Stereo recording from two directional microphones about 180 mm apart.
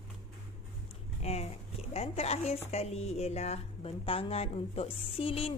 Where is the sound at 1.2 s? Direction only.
35° left (ahead or behind).